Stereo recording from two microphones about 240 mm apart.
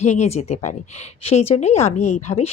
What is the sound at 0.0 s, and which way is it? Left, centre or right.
Speech, left.